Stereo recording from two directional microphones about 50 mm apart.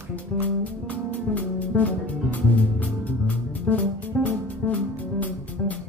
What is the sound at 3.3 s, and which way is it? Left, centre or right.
Music, left.